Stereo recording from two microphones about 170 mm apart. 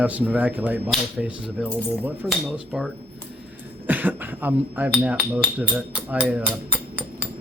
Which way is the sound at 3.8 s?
10° right (ahead or behind).